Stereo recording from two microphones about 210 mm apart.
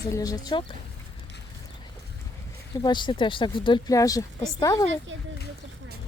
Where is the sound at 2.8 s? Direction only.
20° left (ahead or behind).